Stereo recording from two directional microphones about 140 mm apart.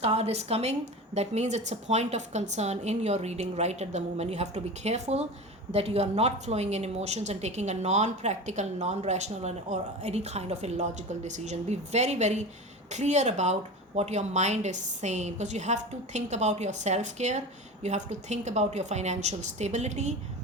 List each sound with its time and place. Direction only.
0.0 s speech: 50° right (ahead or behind)